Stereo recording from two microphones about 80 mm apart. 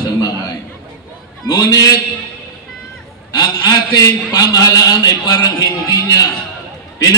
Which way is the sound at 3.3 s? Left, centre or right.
Left.